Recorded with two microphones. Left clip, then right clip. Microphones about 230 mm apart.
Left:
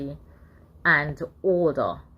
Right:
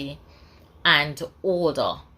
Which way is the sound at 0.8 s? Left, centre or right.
Right.